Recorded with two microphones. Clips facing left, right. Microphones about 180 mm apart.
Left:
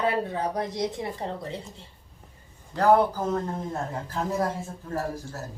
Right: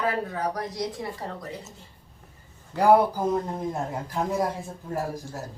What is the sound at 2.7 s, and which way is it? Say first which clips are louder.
A man's voice: right 1 dB; 10° right (ahead or behind).